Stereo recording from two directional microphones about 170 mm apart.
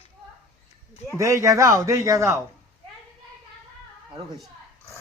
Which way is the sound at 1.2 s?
20° right (ahead or behind).